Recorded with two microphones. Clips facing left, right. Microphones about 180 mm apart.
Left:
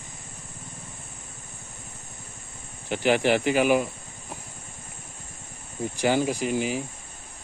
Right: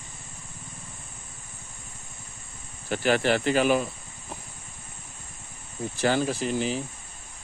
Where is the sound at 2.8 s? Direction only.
15° left (ahead or behind).